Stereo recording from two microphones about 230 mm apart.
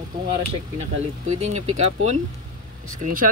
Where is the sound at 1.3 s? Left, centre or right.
Right.